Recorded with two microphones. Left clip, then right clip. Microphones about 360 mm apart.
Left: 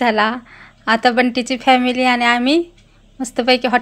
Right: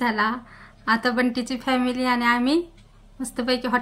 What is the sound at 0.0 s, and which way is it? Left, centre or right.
A woman's voice, centre.